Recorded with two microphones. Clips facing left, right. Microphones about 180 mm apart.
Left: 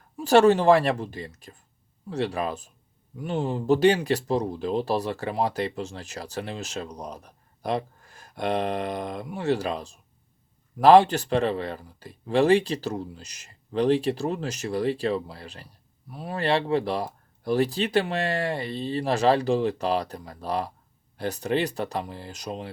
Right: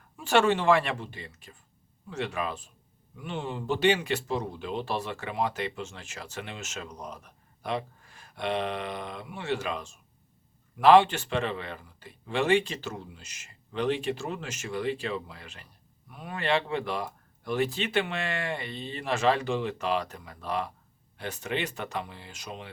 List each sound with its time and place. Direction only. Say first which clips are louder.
0.2 s speech: left 6 dB; 40° left (ahead or behind)